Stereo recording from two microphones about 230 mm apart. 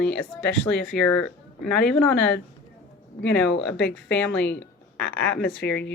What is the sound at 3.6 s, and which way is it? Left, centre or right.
Speech, centre.